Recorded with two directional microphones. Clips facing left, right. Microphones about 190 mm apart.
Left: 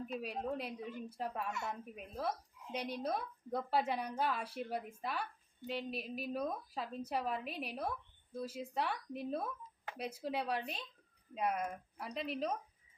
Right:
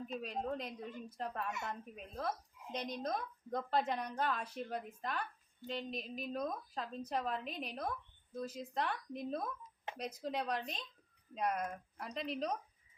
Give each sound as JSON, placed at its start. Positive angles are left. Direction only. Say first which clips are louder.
{"t": 0.0, "sound": "a woman's voice", "louder": "even", "side_deg": 10}